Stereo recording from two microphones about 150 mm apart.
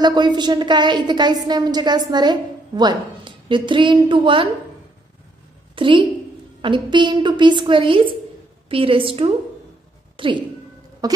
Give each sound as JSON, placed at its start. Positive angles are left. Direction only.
{"t": 0.0, "sound": "a woman's voice", "side_deg": -30}
{"t": 5.8, "sound": "a woman's voice", "side_deg": -35}
{"t": 11.0, "sound": "bleat", "side_deg": -25}